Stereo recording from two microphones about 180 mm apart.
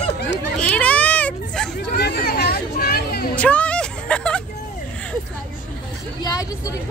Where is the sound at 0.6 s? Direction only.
5° left (ahead or behind).